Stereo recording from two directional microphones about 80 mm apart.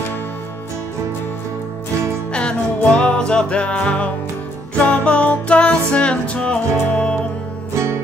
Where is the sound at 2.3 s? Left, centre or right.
Centre.